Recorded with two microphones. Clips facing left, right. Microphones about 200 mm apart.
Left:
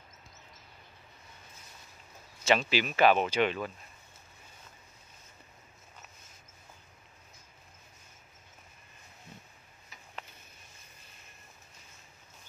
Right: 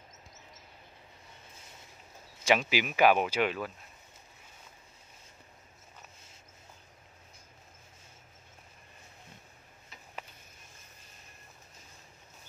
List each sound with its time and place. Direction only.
2.4 s speech: 10° right (ahead or behind)